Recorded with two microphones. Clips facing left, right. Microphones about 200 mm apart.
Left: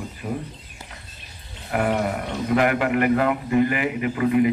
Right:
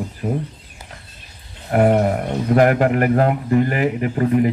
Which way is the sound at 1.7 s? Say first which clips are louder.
Right 7 dB; 45° right (ahead or behind).